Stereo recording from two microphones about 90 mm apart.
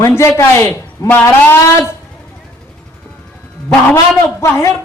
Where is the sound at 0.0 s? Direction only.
35° left (ahead or behind).